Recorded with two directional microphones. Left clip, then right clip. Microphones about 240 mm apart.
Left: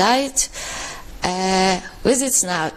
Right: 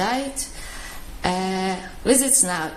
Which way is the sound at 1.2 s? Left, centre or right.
Left.